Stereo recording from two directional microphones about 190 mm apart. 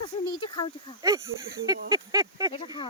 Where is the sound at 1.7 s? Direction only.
20° right (ahead or behind).